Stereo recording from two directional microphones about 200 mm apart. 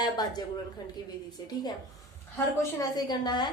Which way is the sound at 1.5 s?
20° left (ahead or behind).